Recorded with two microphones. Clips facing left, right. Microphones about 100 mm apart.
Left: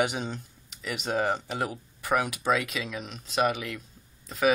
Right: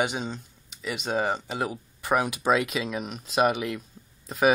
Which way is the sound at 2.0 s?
25° right (ahead or behind).